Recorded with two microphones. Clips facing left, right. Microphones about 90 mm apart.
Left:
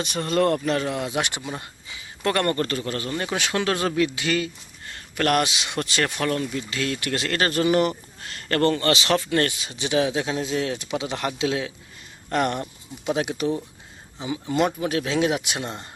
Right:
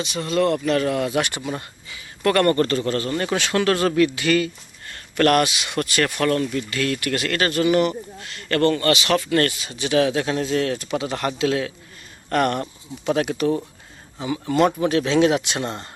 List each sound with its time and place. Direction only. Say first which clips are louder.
0.0 s speech: right 1 dB; 50° left (ahead or behind)
0.6 s speech: right 3 dB; 30° left (ahead or behind)
0.9 s a man's voice: right 4 dB; 20° left (ahead or behind)
14.8 s speech: right 5 dB; 5° left (ahead or behind)
15.6 s speech: right 4 dB; 70° right (ahead or behind)